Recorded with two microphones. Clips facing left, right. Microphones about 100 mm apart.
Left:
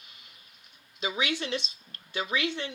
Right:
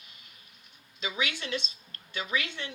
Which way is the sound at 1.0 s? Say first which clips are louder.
Left 3 dB; 25° left (ahead or behind).